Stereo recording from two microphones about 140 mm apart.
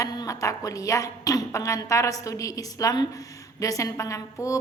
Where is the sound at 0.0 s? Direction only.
25° left (ahead or behind).